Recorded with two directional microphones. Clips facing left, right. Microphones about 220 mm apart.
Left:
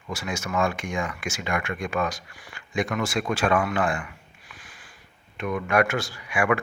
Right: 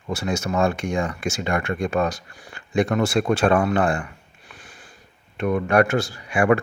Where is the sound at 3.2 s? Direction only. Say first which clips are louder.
Right 4 dB; 35° right (ahead or behind).